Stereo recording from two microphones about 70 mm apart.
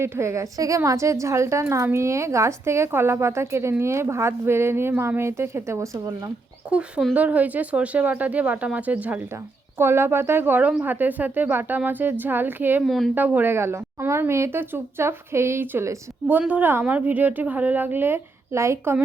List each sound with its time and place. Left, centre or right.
0.0 s a woman's voice: right
6.7 s speech: centre
9.7 s a woman's voice: right
12.8 s a woman's voice: centre
13.1 s speech: right
13.5 s a woman's voice: right